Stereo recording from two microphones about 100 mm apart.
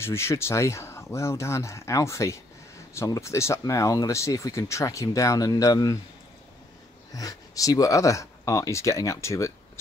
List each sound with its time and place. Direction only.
0.0 s speech: 25° left (ahead or behind)
7.2 s speech: 35° left (ahead or behind)